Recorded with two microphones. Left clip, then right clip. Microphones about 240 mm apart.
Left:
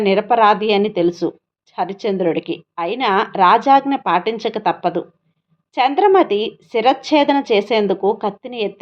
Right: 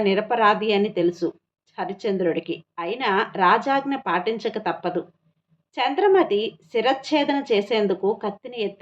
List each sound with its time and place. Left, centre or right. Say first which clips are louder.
0.0 s a woman's voice: left 6 dB; left